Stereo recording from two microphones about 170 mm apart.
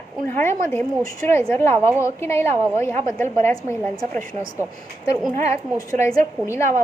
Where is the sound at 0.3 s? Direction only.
15° left (ahead or behind).